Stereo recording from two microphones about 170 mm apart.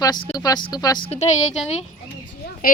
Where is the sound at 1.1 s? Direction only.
40° left (ahead or behind).